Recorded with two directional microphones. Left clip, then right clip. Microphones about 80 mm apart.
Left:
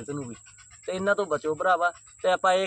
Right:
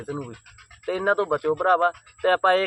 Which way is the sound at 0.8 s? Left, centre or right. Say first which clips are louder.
Right 3 dB; left.